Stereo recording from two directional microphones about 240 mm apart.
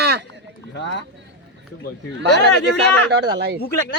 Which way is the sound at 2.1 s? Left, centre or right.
Right.